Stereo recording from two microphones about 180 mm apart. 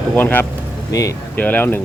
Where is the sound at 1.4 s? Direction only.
10° left (ahead or behind).